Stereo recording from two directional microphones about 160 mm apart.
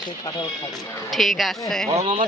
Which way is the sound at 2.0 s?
50° right (ahead or behind).